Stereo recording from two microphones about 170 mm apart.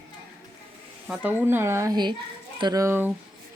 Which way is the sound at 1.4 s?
15° right (ahead or behind).